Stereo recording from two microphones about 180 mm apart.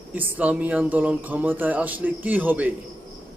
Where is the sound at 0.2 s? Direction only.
10° right (ahead or behind).